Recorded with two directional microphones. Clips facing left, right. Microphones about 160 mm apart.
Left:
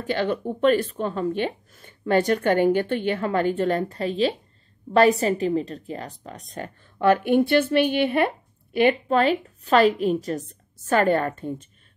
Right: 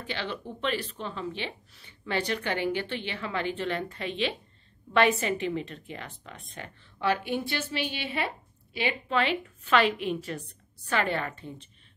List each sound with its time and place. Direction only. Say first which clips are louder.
0.0 s speech: left 11 dB; 45° left (ahead or behind)